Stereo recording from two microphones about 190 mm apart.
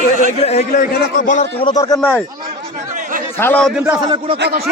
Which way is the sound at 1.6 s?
20° left (ahead or behind).